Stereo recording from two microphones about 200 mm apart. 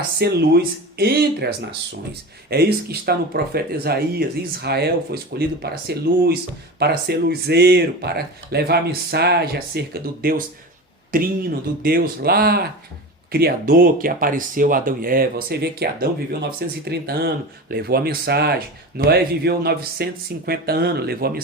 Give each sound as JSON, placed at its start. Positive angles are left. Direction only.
{"t": 0.2, "sound": "speech", "side_deg": -50}
{"t": 2.5, "sound": "speech", "side_deg": -50}